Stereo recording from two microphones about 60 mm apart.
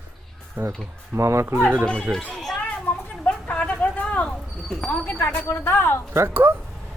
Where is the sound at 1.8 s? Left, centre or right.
Centre.